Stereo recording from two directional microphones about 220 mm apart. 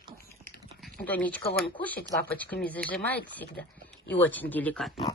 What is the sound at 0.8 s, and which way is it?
Speech, 5° left (ahead or behind).